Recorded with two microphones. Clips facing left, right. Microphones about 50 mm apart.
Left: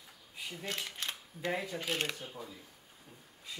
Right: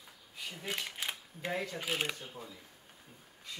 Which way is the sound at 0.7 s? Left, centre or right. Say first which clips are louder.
Right 2 dB; centre.